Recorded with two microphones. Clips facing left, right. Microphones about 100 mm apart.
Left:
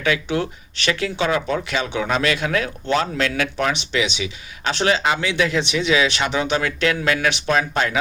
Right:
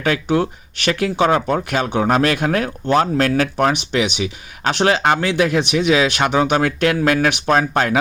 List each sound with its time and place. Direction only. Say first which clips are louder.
0.0 s speech: right 4 dB; 45° right (ahead or behind)